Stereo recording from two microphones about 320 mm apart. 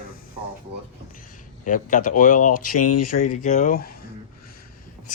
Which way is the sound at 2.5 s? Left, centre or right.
Left.